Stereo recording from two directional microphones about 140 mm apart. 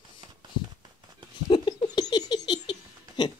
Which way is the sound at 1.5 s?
30° left (ahead or behind).